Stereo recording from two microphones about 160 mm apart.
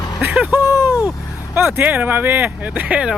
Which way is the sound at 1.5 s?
15° right (ahead or behind).